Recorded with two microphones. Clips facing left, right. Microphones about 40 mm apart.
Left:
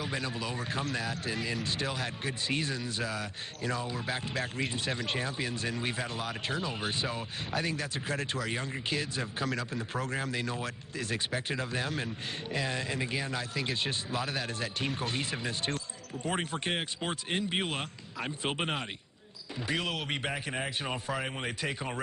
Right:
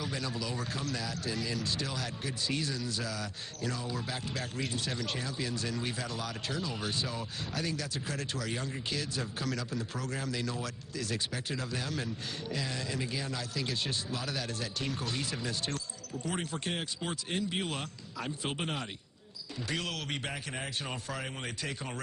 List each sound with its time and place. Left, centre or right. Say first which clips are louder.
0.0 s a man's voice: left 2 dB; left